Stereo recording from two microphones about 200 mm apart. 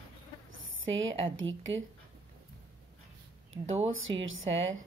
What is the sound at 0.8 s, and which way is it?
Speech, 75° right (ahead or behind).